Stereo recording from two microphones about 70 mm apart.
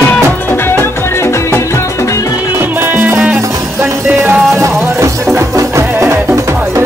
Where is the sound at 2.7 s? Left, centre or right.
Right.